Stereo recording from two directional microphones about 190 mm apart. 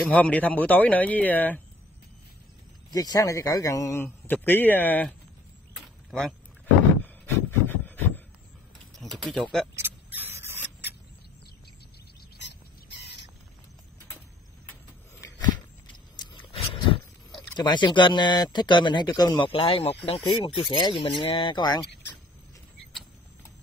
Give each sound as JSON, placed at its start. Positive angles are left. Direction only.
{"t": 0.0, "sound": "speech", "side_deg": 10}
{"t": 2.9, "sound": "speech", "side_deg": 20}
{"t": 6.0, "sound": "a sound", "side_deg": 0}
{"t": 8.9, "sound": "speech", "side_deg": 0}
{"t": 9.8, "sound": "vehicle", "side_deg": -10}
{"t": 10.3, "sound": "a sound", "side_deg": -15}
{"t": 13.0, "sound": "rodents", "side_deg": 65}
{"t": 14.7, "sound": "a sound", "side_deg": 15}
{"t": 16.2, "sound": "speech", "side_deg": 25}